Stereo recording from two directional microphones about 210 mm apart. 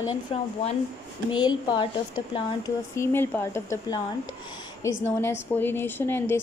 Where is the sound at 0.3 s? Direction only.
30° left (ahead or behind).